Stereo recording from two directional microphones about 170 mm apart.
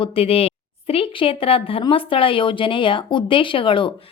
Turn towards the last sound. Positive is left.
turn(degrees=30)  # may be behind; listen again after turning